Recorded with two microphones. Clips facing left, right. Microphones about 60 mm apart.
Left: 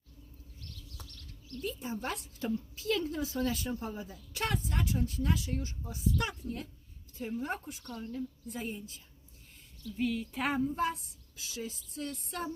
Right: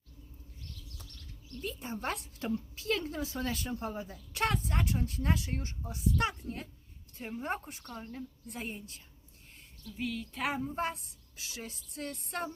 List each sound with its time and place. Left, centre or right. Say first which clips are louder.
1.6 s speech: even; right
10.0 s speech: left 3 dB; centre
10.8 s speech: left 2 dB; right